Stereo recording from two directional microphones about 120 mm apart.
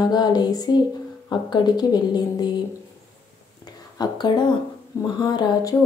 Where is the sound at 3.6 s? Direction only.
35° left (ahead or behind).